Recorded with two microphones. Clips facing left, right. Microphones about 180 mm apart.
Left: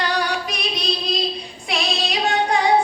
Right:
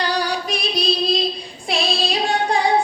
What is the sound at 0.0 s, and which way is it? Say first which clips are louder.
Music: right 1 dB; 35° right (ahead or behind).